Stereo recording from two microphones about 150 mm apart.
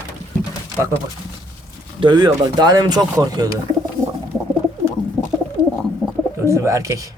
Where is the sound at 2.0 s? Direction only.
30° right (ahead or behind).